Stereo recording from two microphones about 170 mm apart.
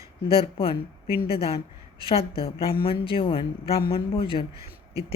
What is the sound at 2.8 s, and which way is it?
Speech, 30° left (ahead or behind).